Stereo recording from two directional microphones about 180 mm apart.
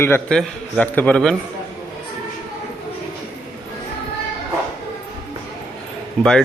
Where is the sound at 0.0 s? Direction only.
15° left (ahead or behind).